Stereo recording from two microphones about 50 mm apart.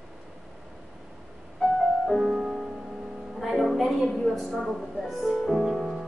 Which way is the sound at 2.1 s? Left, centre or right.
Centre.